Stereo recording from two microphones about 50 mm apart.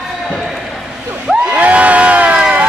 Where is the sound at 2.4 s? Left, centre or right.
Right.